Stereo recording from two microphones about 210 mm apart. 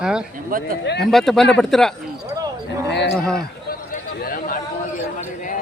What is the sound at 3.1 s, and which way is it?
Speech, 5° left (ahead or behind).